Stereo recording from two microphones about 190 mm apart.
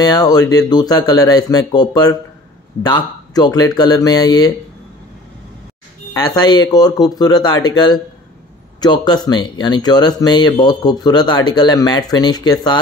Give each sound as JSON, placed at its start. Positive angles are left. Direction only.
{"t": 0.0, "sound": "speech", "side_deg": 20}
{"t": 6.1, "sound": "speech", "side_deg": 20}